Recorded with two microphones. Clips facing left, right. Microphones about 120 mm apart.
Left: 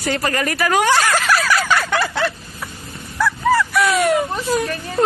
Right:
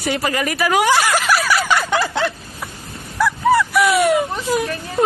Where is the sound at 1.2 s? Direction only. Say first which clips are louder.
Even; 10° right (ahead or behind).